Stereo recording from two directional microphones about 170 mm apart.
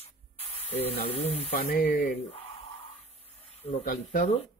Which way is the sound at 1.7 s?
60° left (ahead or behind).